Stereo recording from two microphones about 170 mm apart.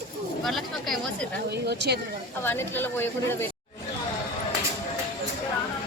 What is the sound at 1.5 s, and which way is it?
Speech, 80° right.